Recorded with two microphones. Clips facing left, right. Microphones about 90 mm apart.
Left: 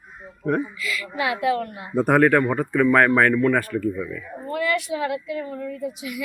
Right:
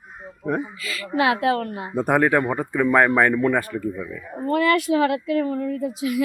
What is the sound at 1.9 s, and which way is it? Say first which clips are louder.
Speech: left 2 dB; 5° right (ahead or behind).